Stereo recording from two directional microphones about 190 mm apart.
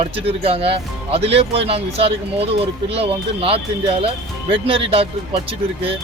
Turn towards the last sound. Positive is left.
turn(degrees=-30)  # may be behind; listen again after turning